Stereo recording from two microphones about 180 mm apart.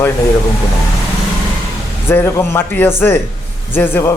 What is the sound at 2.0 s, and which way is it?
Speech, 15° left (ahead or behind).